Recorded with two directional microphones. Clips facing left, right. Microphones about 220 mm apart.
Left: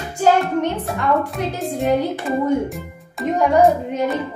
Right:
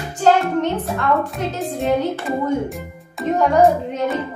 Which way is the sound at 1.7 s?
15° left (ahead or behind).